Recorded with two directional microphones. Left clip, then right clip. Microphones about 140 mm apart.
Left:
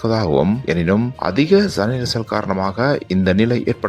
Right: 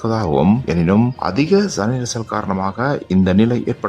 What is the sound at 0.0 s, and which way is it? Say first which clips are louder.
Speech: even; 20° left (ahead or behind).